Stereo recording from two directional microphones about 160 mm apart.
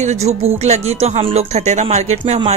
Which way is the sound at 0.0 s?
45° right (ahead or behind).